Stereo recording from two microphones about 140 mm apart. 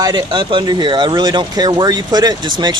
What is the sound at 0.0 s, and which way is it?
Speech, 35° right (ahead or behind).